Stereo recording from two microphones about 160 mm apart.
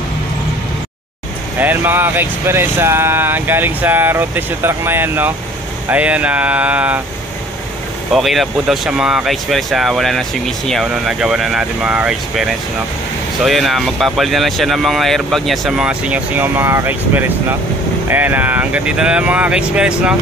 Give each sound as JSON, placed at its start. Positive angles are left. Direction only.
{"t": 1.6, "sound": "speech", "side_deg": -10}
{"t": 8.1, "sound": "speech", "side_deg": 0}